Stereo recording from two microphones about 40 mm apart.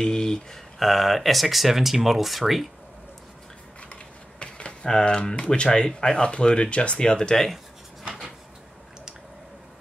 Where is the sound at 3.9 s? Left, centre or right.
Left.